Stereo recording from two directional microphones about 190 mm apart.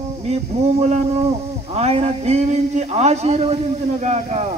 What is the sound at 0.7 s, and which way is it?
Speech, 35° right (ahead or behind).